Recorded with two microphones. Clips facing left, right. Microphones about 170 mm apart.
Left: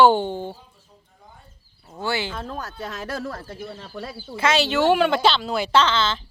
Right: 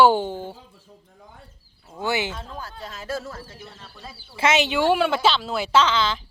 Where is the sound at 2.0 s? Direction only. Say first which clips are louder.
Right 1 dB; 20° right (ahead or behind).